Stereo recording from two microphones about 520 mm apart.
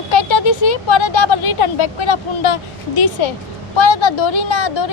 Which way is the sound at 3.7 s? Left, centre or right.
Left.